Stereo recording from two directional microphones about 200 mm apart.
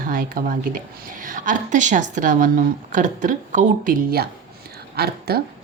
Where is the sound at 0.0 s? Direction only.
45° right (ahead or behind).